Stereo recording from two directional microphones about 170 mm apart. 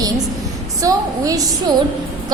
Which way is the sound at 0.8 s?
20° right (ahead or behind).